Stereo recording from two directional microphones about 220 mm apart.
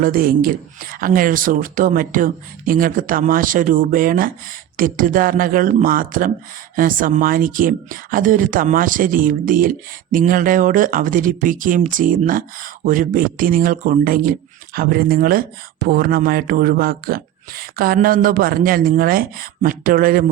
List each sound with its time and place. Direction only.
0.0 s speech: 40° right (ahead or behind)